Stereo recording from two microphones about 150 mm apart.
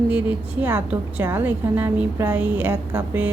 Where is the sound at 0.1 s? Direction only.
15° right (ahead or behind).